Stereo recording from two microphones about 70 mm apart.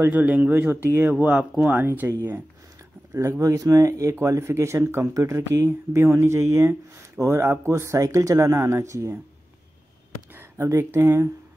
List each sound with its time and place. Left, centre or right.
0.0 s speech: right
3.1 s speech: right
10.6 s speech: right